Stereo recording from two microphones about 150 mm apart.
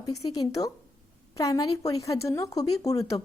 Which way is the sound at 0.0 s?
25° left (ahead or behind).